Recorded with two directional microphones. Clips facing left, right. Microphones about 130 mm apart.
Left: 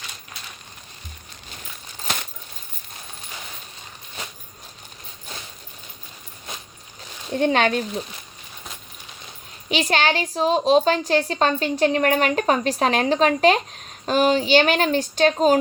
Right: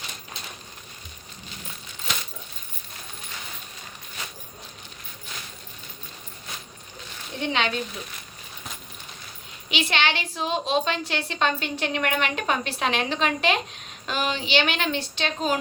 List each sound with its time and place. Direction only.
7.3 s speech: 45° left (ahead or behind)
9.6 s a woman's voice: 40° left (ahead or behind)